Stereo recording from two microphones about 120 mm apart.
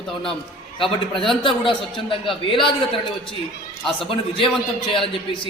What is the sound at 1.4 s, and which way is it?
A man's voice, 45° left (ahead or behind).